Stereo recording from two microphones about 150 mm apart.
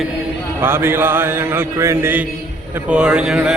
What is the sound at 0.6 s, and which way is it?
Mantra, 15° right (ahead or behind).